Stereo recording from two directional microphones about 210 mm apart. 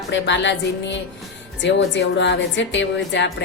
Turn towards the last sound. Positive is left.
turn(degrees=60)  # may be behind; listen again after turning